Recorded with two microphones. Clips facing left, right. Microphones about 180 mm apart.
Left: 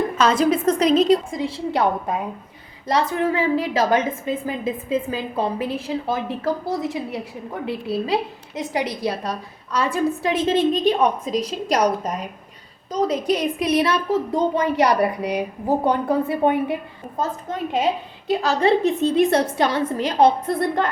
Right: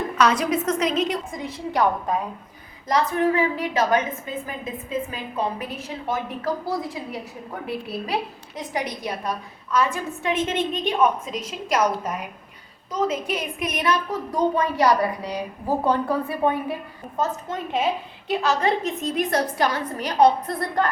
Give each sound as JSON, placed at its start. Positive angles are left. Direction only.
{"t": 0.2, "sound": "a woman's voice", "side_deg": 30}
{"t": 9.0, "sound": "a woman's voice", "side_deg": 35}
{"t": 18.3, "sound": "a woman's voice", "side_deg": 35}